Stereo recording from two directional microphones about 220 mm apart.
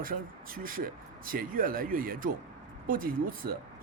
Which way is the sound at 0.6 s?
40° right (ahead or behind).